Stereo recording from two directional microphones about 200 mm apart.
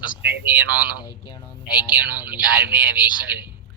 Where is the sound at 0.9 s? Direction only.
20° left (ahead or behind).